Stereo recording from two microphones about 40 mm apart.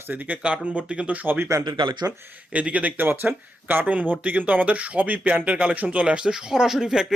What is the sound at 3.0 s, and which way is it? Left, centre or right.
Speech, right.